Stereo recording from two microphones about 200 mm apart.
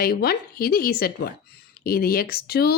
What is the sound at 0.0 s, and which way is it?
Speech, 50° left (ahead or behind).